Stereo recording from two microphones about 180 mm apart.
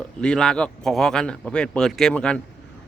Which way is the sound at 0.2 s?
5° left (ahead or behind).